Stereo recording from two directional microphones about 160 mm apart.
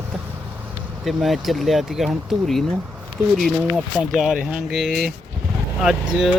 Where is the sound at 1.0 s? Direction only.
Centre (ahead or behind).